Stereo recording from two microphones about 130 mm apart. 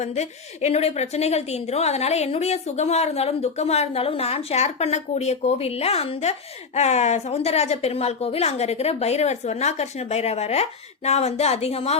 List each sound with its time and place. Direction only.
0.0 s a woman's voice: 60° left (ahead or behind)